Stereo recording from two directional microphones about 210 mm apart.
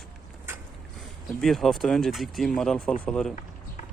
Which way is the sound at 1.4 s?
Centre (ahead or behind).